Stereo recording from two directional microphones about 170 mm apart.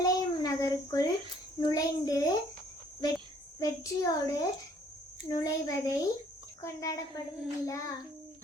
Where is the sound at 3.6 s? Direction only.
20° left (ahead or behind).